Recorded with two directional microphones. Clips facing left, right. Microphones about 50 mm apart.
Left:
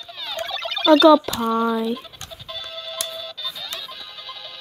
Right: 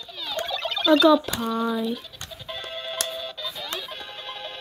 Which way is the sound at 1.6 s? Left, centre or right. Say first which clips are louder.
Left 4 dB; left.